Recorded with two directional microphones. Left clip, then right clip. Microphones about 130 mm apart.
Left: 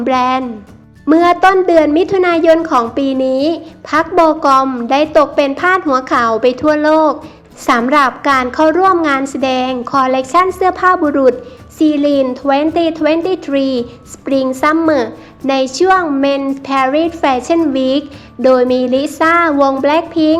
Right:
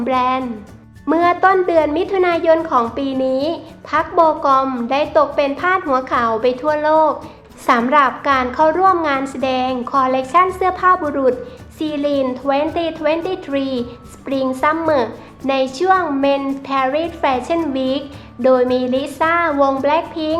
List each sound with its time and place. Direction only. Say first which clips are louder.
0.0 s a woman's voice: left 4 dB; 35° left (ahead or behind)